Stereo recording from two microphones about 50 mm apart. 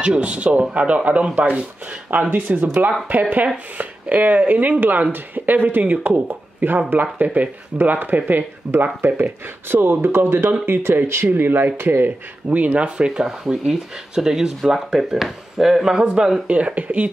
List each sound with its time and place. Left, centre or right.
0.0 s speech: right
11.2 s speech: right
12.5 s speech: right